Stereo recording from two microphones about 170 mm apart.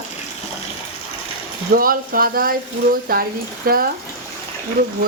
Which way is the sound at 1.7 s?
60° right (ahead or behind).